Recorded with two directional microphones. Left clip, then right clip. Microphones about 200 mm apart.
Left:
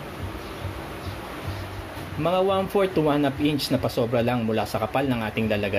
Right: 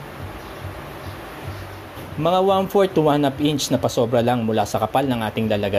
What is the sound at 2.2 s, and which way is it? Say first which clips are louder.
Speech: right 5 dB; 25° right (ahead or behind).